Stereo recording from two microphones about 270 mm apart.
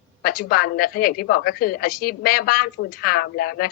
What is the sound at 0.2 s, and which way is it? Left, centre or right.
A woman's voice, left.